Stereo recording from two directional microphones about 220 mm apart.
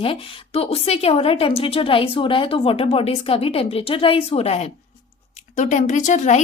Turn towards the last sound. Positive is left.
turn(degrees=30)  # may be behind; listen again after turning